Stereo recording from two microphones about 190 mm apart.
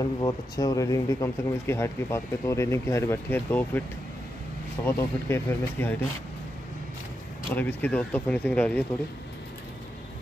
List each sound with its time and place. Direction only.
0.0 s speech: 20° left (ahead or behind)
4.8 s speech: 10° left (ahead or behind)
7.5 s speech: 10° left (ahead or behind)